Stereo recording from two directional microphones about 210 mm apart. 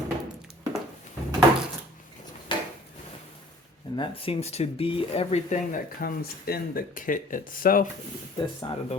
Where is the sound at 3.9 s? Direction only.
25° left (ahead or behind); by 7.9 s 40° left (ahead or behind).